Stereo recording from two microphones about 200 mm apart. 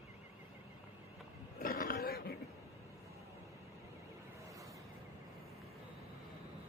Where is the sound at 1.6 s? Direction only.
45° left (ahead or behind).